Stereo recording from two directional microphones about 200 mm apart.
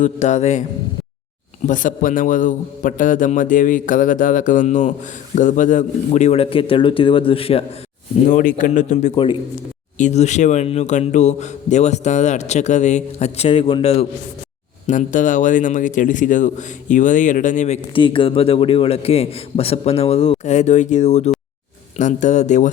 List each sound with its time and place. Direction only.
0.0 s a man's voice: 35° left (ahead or behind)
1.6 s a man's voice: 40° left (ahead or behind)
8.3 s a man's voice: 40° left (ahead or behind)
17.9 s a man's voice: 25° left (ahead or behind)